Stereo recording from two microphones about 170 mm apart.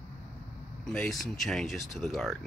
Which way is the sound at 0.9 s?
Centre (ahead or behind).